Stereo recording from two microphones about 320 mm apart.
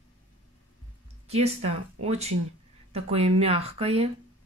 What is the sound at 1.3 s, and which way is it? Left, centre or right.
Speech, centre.